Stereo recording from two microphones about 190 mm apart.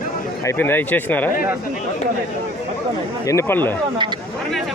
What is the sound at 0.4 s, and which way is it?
Speech, 10° left (ahead or behind).